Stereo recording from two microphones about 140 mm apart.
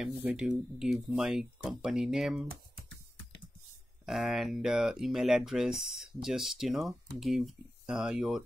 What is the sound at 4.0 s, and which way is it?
Speech, centre (ahead or behind).